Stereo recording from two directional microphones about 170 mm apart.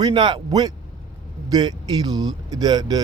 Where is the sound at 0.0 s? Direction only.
25° right (ahead or behind).